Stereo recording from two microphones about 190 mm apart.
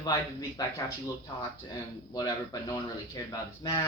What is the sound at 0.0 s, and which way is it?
Speech, 20° left (ahead or behind).